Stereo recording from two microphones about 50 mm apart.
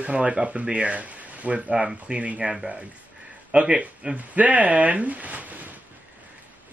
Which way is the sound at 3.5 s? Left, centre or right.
Right.